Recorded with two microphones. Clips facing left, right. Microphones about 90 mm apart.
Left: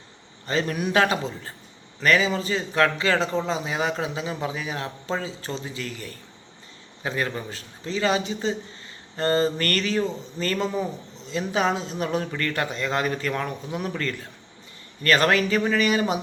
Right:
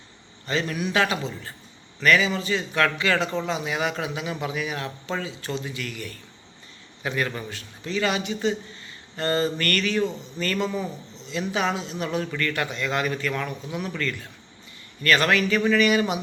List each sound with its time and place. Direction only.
0.4 s a man's voice: 40° left (ahead or behind)